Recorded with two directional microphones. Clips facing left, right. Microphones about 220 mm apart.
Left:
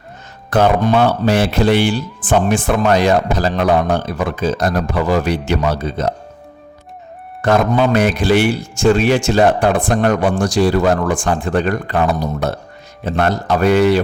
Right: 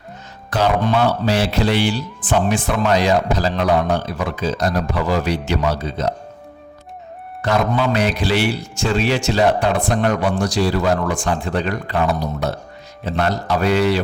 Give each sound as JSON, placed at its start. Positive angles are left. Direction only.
{"t": 0.5, "sound": "speech", "side_deg": 55}
{"t": 7.4, "sound": "speech", "side_deg": 50}